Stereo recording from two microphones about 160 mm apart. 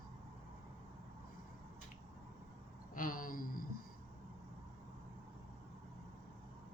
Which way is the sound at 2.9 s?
60° left (ahead or behind).